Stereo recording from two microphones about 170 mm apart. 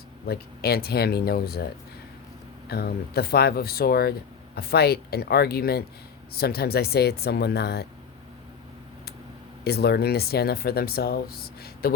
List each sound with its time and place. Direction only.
0.3 s speech: 65° left (ahead or behind)
9.6 s speech: 70° left (ahead or behind)